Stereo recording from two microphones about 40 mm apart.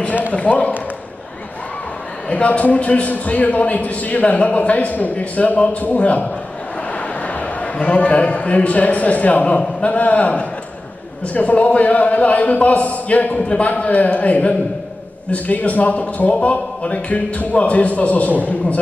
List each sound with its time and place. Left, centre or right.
0.3 s a man's voice: left
2.3 s a man's voice: left